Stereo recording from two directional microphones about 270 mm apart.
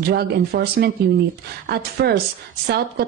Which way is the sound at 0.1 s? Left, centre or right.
Right.